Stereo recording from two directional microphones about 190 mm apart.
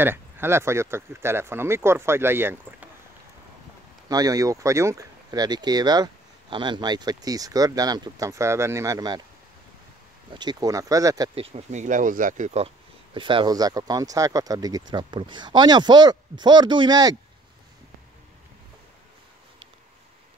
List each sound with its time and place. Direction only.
0.0 s speech: 10° right (ahead or behind)
4.1 s speech: 20° right (ahead or behind)
10.3 s speech: 20° right (ahead or behind)
11.3 s speech: 30° right (ahead or behind)